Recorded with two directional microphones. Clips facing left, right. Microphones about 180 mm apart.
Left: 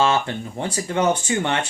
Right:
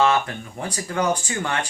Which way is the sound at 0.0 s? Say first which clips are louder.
Even; 30° left (ahead or behind).